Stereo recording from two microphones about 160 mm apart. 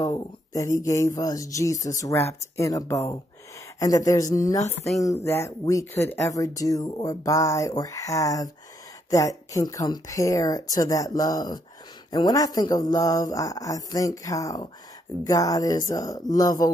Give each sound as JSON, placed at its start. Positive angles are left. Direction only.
{"t": 0.0, "sound": "speech", "side_deg": 20}